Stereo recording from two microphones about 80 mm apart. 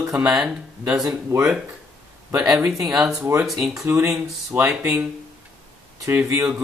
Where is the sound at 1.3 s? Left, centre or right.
Right.